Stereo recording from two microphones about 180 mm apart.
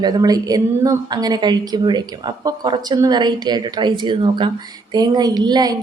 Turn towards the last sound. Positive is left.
turn(degrees=-20)  # may be behind; listen again after turning